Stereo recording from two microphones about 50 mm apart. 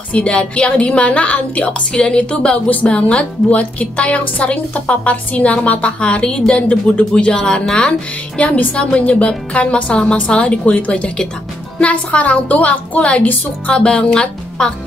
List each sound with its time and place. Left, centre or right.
0.1 s a woman's voice: left
8.4 s a woman's voice: left